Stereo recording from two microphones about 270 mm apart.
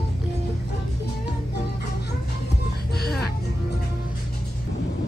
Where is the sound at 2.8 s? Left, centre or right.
Left.